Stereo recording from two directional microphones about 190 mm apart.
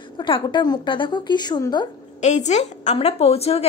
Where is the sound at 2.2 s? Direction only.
35° left (ahead or behind).